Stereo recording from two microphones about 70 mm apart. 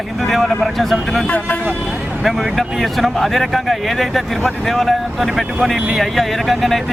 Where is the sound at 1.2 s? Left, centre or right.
Centre.